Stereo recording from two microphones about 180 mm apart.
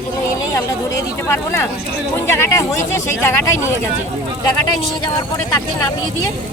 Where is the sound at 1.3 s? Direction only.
15° left (ahead or behind).